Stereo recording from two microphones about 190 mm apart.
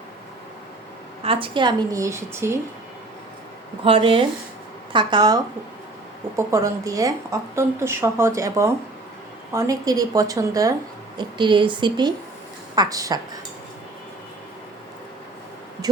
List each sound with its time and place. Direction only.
1.2 s a woman's voice: 30° right (ahead or behind)
3.8 s a woman's voice: 30° right (ahead or behind)